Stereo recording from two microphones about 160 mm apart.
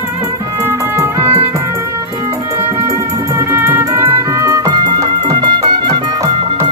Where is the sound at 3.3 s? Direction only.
15° right (ahead or behind).